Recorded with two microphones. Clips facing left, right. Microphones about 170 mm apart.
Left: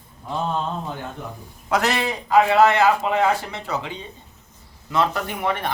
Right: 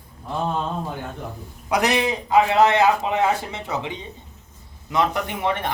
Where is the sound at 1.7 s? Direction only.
15° right (ahead or behind).